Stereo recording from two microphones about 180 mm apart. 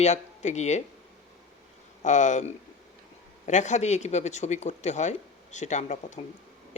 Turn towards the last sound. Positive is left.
turn(degrees=40)  # may be behind; listen again after turning